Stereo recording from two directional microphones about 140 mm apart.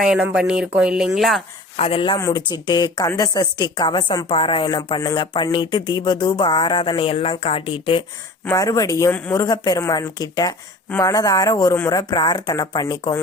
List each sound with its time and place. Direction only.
0.1 s speech: 5° right (ahead or behind)
1.7 s speech: 45° left (ahead or behind)
2.1 s a woman's voice: 25° left (ahead or behind)
8.4 s speech: 25° left (ahead or behind)